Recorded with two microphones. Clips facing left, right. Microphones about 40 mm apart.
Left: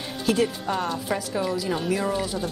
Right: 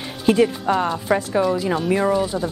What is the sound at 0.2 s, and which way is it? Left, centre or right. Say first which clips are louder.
A woman's voice: right 6 dB; right.